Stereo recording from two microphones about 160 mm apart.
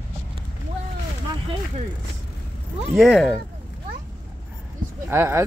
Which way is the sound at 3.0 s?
Centre (ahead or behind).